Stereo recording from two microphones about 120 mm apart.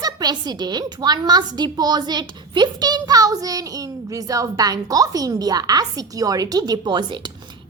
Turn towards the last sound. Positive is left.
turn(degrees=-40)  # may be behind; listen again after turning